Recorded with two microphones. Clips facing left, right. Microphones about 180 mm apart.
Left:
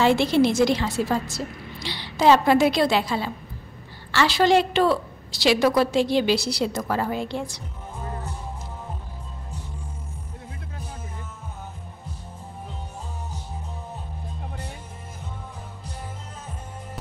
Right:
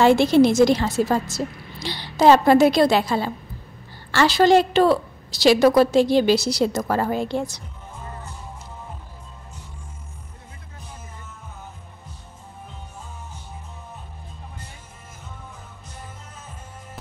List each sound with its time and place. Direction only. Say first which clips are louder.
0.0 s a woman's voice: right 4 dB; 45° right (ahead or behind)